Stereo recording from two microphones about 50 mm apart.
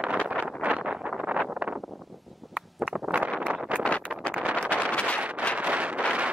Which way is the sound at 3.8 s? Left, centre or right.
Left.